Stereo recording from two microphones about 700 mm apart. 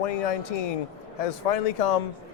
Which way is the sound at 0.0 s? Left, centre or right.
Left.